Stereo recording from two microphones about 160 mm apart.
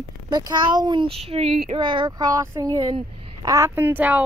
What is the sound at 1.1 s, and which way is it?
Speech, 40° right (ahead or behind).